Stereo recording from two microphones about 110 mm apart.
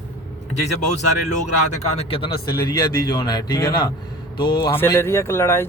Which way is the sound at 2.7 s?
40° left (ahead or behind).